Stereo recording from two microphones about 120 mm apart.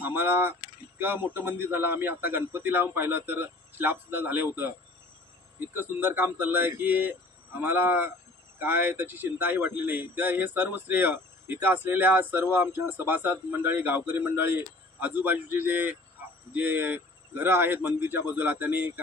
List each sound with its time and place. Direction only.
0.0 s speech: 15° right (ahead or behind)
5.8 s speech: 15° right (ahead or behind)